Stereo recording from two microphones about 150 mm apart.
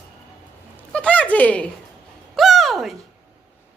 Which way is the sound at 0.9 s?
10° left (ahead or behind).